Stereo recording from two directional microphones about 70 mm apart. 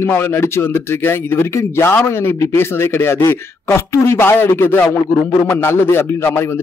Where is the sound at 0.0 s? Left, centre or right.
Left.